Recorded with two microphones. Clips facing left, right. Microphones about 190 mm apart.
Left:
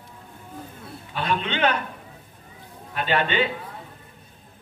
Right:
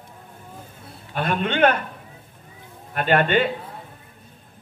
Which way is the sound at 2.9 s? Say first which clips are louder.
Right 4 dB; 50° right (ahead or behind).